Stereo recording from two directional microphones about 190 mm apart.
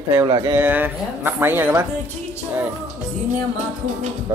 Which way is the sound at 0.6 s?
10° right (ahead or behind).